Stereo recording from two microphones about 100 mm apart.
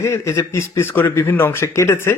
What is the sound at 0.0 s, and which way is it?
A man's voice, 25° left (ahead or behind).